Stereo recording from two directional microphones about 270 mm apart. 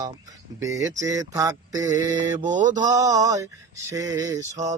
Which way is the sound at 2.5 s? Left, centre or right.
Right.